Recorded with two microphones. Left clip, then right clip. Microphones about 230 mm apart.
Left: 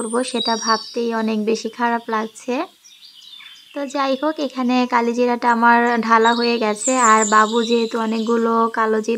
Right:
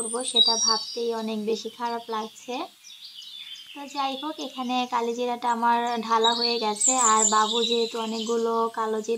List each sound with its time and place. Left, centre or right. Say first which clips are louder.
0.0 s a woman's voice: left 1 dB; left
3.7 s a woman's voice: left 9 dB; left